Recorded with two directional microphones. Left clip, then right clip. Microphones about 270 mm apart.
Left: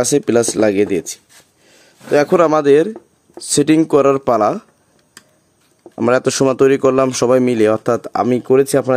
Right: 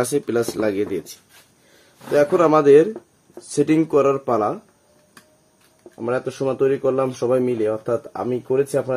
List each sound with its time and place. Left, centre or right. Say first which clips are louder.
0.0 s speech: left 7 dB; left
5.9 s speech: left 10 dB; left